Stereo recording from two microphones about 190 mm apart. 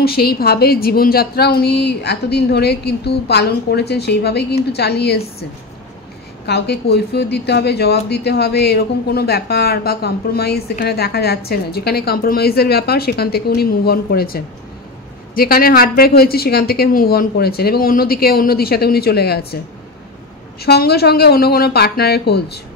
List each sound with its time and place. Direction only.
0.0 s a woman's voice: 55° left (ahead or behind)
6.4 s a woman's voice: 60° left (ahead or behind)
20.6 s a woman's voice: 55° left (ahead or behind)